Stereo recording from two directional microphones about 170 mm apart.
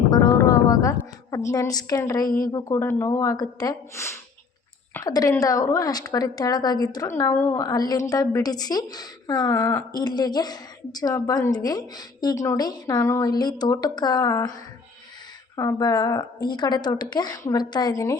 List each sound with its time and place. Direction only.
0.1 s a woman's voice: 20° left (ahead or behind)
2.2 s a woman's voice: 55° left (ahead or behind)
2.5 s a woman's voice: 20° left (ahead or behind)
9.6 s speech: 10° left (ahead or behind)
9.9 s a woman's voice: 25° left (ahead or behind)